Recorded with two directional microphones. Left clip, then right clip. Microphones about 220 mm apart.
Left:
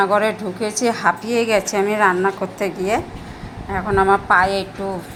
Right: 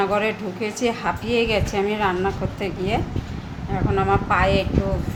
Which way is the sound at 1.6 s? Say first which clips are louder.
Left 5 dB; centre (ahead or behind).